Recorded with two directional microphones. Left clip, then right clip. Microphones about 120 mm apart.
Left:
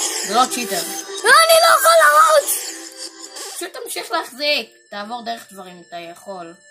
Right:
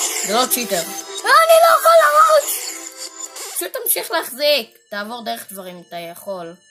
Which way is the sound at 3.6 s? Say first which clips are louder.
Right 4 dB; 65° right (ahead or behind).